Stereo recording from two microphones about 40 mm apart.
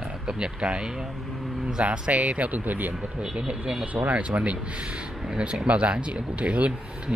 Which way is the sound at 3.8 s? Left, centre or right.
Right.